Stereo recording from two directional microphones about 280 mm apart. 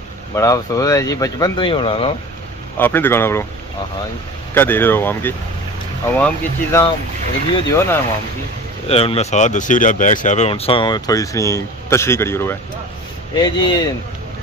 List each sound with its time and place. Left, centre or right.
0.4 s speech: centre
2.8 s speech: centre
4.6 s speech: centre
8.8 s speech: left